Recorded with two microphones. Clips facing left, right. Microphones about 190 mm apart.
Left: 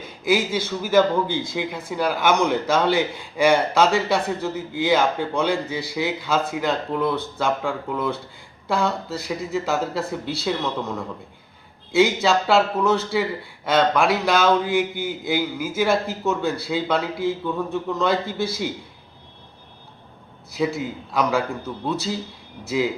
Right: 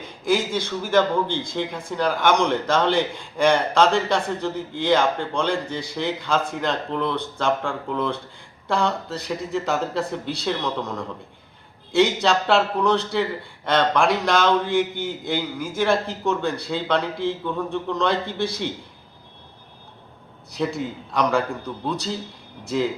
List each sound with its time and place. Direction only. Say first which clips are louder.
0.3 s a man's voice: left 1 dB; 5° left (ahead or behind)
20.5 s a man's voice: left 2 dB; 5° left (ahead or behind)